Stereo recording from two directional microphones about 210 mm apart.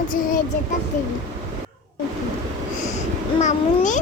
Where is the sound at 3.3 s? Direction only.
35° left (ahead or behind).